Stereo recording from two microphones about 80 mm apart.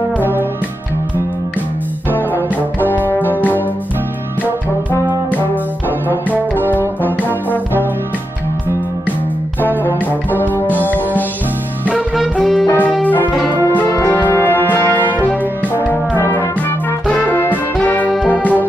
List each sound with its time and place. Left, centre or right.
0.2 s music: right
2.0 s brass instrument: left
6.7 s brass instrument: left
10.3 s music: left
12.6 s music: left
15.2 s brass instrument: left
16.2 s music: left